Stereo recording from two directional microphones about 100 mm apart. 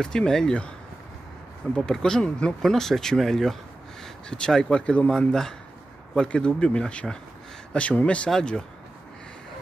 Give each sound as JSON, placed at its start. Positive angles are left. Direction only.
{"t": 0.0, "sound": "speech", "side_deg": 5}
{"t": 1.8, "sound": "speech", "side_deg": 5}